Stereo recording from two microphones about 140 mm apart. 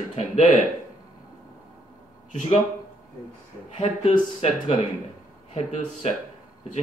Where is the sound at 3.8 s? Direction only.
45° left (ahead or behind).